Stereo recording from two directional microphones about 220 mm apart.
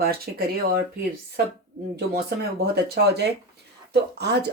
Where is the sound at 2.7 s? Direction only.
45° right (ahead or behind).